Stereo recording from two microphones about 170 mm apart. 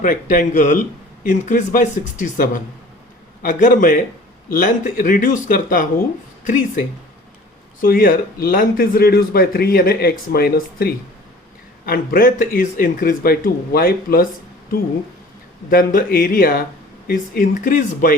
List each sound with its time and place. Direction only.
0.0 s a man's voice: 50° left (ahead or behind)
15.7 s a man's voice: 55° left (ahead or behind)